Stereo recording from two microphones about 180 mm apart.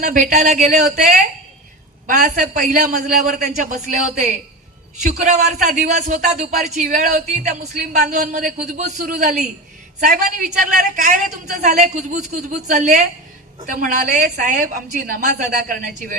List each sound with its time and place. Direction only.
0.0 s speech: 50° right (ahead or behind)
10.8 s speech: 45° right (ahead or behind)